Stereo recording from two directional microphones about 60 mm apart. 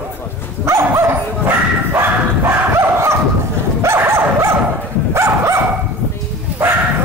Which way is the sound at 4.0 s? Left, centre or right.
Right.